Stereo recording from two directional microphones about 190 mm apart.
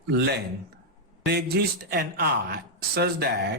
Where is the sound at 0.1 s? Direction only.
60° right (ahead or behind).